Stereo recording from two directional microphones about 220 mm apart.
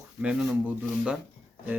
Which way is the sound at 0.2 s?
5° right (ahead or behind).